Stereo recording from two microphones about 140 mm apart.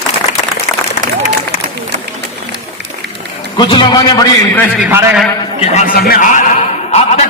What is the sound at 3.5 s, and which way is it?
Speech, 35° left (ahead or behind).